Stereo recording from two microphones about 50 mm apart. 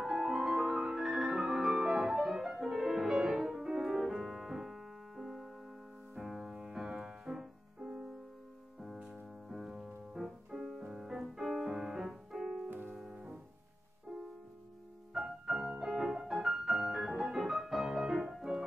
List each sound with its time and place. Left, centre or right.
0.0 s music: centre
8.8 s music: centre
12.6 s music: right
12.9 s music: centre
15.1 s music: centre